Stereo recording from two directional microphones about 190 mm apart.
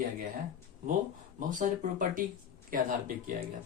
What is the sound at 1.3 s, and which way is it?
Speech, 45° right (ahead or behind).